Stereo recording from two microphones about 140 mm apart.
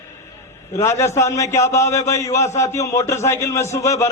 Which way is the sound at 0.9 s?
20° left (ahead or behind).